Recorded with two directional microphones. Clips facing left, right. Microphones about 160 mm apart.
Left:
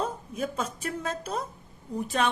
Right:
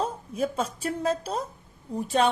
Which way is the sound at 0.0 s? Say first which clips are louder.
Right 3 dB; 35° right (ahead or behind).